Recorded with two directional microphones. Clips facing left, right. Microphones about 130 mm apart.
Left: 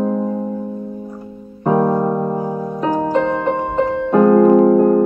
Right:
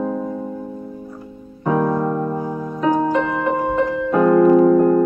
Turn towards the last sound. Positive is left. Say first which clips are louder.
# left 1 dB
turn(degrees=30)  # may be behind; listen again after turning